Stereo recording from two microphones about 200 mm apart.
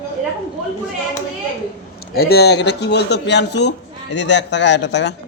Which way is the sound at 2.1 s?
50° left (ahead or behind).